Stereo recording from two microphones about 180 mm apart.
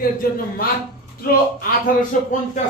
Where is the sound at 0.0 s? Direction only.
55° left (ahead or behind).